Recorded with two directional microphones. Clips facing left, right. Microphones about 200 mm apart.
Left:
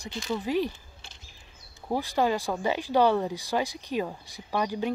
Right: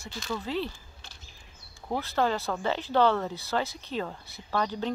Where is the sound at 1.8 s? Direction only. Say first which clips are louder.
Left 2 dB; 15° left (ahead or behind).